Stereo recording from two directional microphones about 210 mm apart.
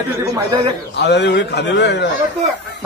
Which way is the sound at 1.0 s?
55° left (ahead or behind).